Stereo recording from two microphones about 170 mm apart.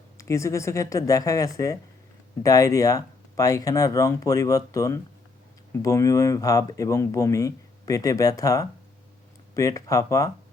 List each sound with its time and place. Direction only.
0.2 s speech: 20° left (ahead or behind)